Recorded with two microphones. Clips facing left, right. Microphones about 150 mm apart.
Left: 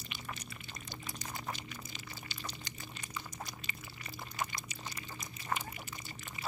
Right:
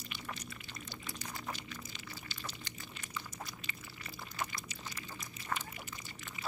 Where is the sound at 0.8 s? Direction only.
15° left (ahead or behind).